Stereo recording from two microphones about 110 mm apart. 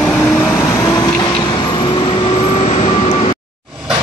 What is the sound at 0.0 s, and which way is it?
Vehicle, 20° left (ahead or behind).